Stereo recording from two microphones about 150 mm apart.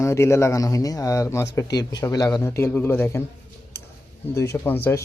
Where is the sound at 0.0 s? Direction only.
20° left (ahead or behind).